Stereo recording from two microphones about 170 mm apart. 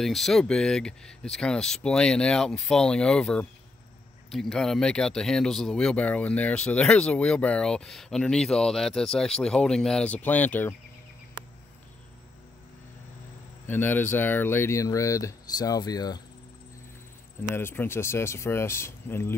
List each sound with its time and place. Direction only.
0.0 s speech: centre (ahead or behind)
13.7 s speech: 10° left (ahead or behind)
17.6 s speech: 15° left (ahead or behind)